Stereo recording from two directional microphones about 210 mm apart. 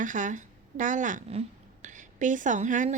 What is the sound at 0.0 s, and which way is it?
Speech, 35° right (ahead or behind).